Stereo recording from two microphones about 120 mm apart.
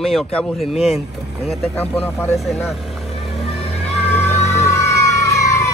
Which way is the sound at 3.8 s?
15° left (ahead or behind).